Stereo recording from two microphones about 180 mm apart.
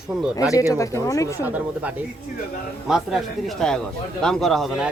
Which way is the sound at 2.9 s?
Centre (ahead or behind).